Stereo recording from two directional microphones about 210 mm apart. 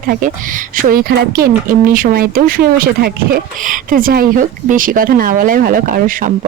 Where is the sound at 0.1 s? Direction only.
40° right (ahead or behind).